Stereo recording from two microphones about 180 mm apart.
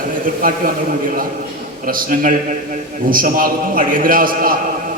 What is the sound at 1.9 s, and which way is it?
A man's voice, 50° right (ahead or behind).